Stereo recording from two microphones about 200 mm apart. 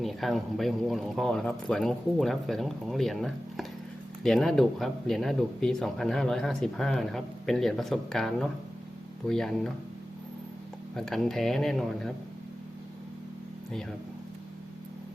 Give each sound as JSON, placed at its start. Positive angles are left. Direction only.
{"t": 0.0, "sound": "speech", "side_deg": 0}
{"t": 10.9, "sound": "speech", "side_deg": 0}